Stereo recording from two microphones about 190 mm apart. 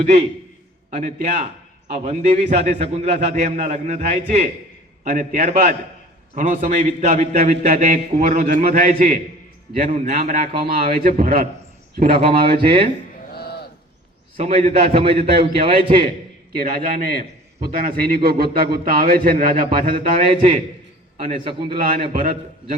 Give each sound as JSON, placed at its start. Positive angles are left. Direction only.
{"t": 0.0, "sound": "a man's voice", "side_deg": -35}
{"t": 12.1, "sound": "speech", "side_deg": -30}
{"t": 13.3, "sound": "a sound", "side_deg": 55}
{"t": 14.3, "sound": "a man's voice", "side_deg": -35}
{"t": 16.6, "sound": "a man's voice", "side_deg": -50}
{"t": 21.2, "sound": "speech", "side_deg": -25}
{"t": 21.8, "sound": "a man's voice", "side_deg": -45}